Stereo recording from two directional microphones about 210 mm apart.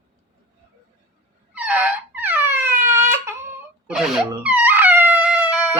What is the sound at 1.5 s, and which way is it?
Wail, 5° right (ahead or behind).